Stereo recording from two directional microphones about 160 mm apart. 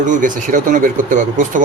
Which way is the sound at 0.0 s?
50° right (ahead or behind).